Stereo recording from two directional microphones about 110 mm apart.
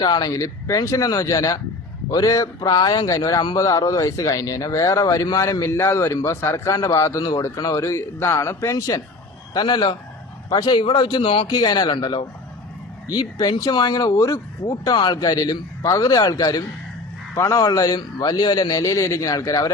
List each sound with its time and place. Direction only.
0.0 s a man's voice: 40° left (ahead or behind); by 11.4 s 55° left (ahead or behind)
11.4 s speech: 40° left (ahead or behind)
14.9 s speech: 40° left (ahead or behind)